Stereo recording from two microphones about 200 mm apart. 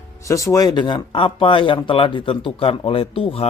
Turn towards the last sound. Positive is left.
turn(degrees=30)  # may be behind; listen again after turning